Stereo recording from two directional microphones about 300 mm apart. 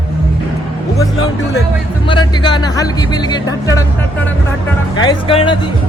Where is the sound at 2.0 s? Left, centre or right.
Centre.